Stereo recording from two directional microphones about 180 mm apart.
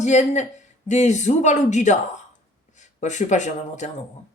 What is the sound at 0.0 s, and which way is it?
Speech, 40° left (ahead or behind).